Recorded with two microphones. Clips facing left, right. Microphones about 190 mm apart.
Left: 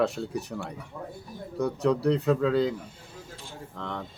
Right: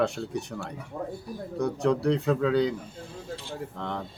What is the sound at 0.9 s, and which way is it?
Speech, 30° right (ahead or behind).